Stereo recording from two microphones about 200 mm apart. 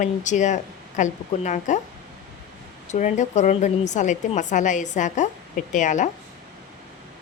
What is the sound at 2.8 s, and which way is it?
A woman's voice, 35° left (ahead or behind).